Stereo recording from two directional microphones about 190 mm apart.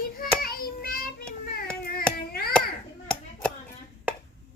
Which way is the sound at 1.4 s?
55° left (ahead or behind).